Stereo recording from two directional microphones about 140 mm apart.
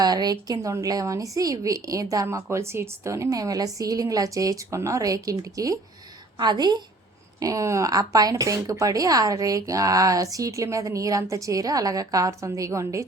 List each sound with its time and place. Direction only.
0.0 s a woman's voice: 30° right (ahead or behind)